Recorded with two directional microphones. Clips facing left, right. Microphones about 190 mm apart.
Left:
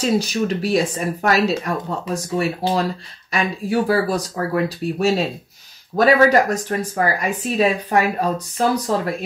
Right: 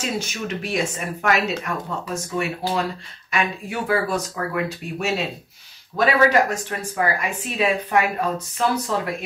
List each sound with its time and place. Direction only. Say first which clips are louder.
0.0 s speech: left 8 dB; 35° left (ahead or behind)